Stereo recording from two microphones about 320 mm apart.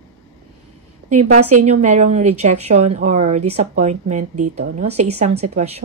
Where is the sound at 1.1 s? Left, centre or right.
Right.